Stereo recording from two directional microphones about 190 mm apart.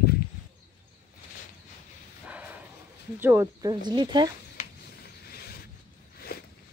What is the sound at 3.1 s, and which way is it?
Speech, 15° right (ahead or behind).